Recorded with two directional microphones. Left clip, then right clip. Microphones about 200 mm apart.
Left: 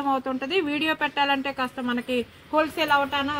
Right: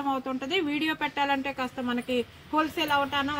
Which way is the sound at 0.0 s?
10° left (ahead or behind).